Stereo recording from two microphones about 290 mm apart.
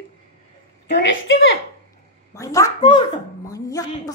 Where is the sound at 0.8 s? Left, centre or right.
Left.